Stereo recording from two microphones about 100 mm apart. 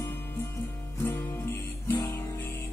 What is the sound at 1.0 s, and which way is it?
Guitar, 20° left (ahead or behind).